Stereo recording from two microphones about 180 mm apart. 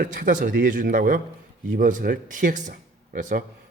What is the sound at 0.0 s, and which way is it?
Speech, 50° right (ahead or behind).